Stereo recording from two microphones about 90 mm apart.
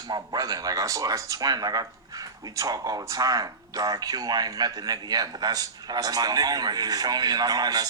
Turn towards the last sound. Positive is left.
turn(degrees=-45)  # may be behind; listen again after turning